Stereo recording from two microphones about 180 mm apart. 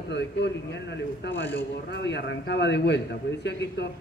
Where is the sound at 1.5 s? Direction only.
75° left (ahead or behind).